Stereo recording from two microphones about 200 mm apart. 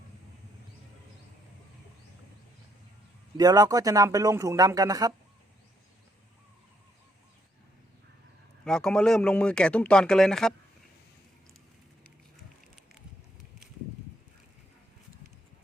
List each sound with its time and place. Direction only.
3.3 s a man's voice: 20° right (ahead or behind)
8.6 s speech: 5° left (ahead or behind)